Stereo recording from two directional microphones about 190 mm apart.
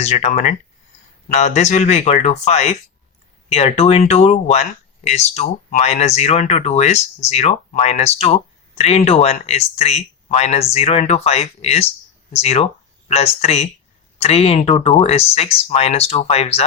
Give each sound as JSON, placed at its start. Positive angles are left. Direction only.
{"t": 0.0, "sound": "speech", "side_deg": 35}